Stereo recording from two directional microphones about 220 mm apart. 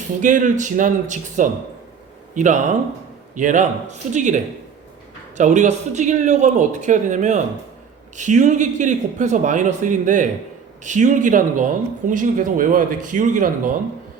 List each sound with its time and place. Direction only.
0.2 s speech: 35° right (ahead or behind)
5.4 s speech: 30° right (ahead or behind)